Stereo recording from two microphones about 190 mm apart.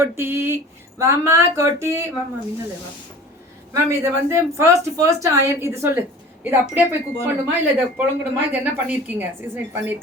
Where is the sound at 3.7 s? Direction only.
15° right (ahead or behind).